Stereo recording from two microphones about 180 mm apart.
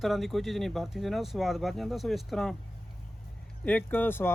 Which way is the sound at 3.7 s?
10° left (ahead or behind).